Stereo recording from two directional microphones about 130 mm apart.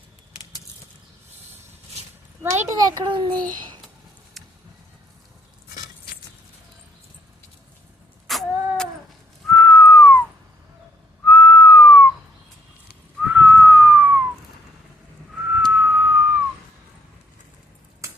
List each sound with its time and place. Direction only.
2.4 s a child's voice: 20° right (ahead or behind); by 3.4 s 35° right (ahead or behind)
4.4 s a sound: centre (ahead or behind)
8.3 s a sound: centre (ahead or behind)
9.5 s whistling: 5° left (ahead or behind)
11.3 s whistling: 5° left (ahead or behind)
13.2 s whistling: 15° right (ahead or behind)
15.5 s whistling: 5° right (ahead or behind)